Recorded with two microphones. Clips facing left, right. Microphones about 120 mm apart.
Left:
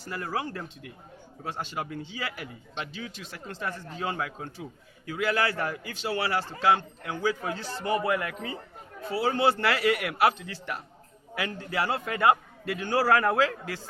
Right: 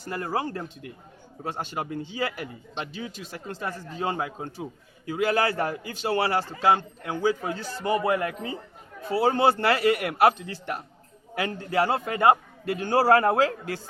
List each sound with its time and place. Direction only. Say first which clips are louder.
0.0 s a man's voice: right 3 dB; 45° right (ahead or behind)
9.0 s a man's voice: right 3 dB; 45° right (ahead or behind)